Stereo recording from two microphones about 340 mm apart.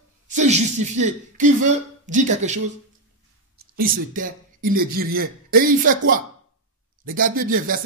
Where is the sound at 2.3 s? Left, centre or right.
Right.